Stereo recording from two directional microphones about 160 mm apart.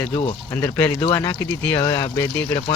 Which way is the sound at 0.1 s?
35° left (ahead or behind).